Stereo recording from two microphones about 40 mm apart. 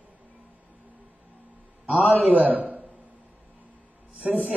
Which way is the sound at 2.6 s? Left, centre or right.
Right.